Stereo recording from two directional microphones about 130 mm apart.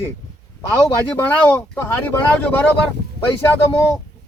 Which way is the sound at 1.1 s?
15° left (ahead or behind).